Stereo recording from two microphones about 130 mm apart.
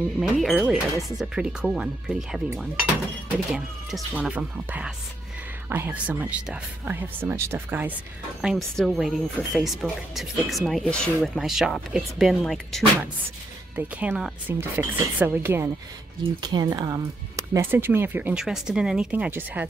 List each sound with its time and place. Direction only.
0.2 s speech: centre (ahead or behind)
3.5 s speech: 5° right (ahead or behind)
8.4 s speech: centre (ahead or behind)
13.7 s speech: 10° right (ahead or behind)
16.3 s speech: 35° right (ahead or behind); by 19.7 s 15° right (ahead or behind)